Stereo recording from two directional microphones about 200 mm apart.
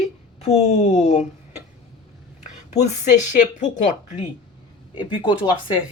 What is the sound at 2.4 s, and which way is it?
Speech, 35° left (ahead or behind).